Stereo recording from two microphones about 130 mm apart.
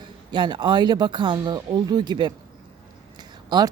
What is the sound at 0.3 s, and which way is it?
Speech, 35° right (ahead or behind).